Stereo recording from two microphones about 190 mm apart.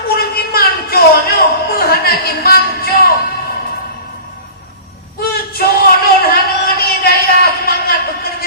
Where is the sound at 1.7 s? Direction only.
55° left (ahead or behind).